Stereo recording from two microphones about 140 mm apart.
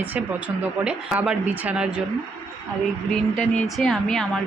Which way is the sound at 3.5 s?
5° left (ahead or behind).